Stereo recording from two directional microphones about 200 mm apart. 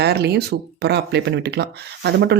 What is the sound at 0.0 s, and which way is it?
Speech, 55° right (ahead or behind).